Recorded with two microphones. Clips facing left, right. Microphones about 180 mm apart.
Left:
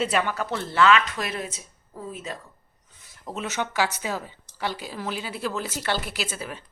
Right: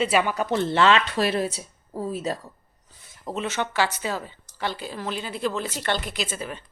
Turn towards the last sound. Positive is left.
turn(degrees=5)  # may be behind; listen again after turning